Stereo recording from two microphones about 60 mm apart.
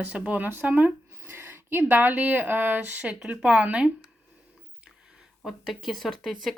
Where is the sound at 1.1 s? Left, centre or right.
Right.